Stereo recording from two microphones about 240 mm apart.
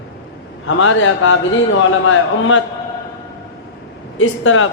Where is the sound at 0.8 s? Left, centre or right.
Left.